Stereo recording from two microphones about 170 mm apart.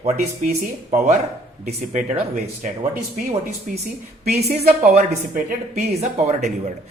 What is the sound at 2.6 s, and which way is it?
Speech, 50° right (ahead or behind).